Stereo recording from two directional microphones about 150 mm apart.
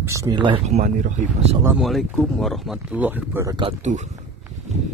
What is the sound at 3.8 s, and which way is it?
Speech, 50° right (ahead or behind).